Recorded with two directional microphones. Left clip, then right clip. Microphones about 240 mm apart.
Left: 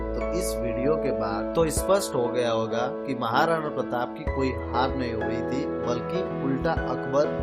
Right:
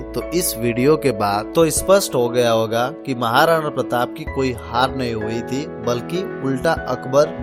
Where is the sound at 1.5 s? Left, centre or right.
Right.